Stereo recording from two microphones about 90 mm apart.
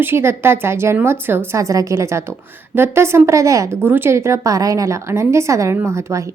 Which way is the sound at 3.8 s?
25° right (ahead or behind).